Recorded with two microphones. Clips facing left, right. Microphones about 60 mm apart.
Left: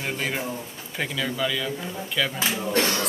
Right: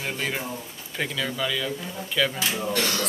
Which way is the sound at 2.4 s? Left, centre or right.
Left.